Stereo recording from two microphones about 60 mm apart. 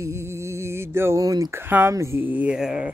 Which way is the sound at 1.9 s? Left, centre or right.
Right.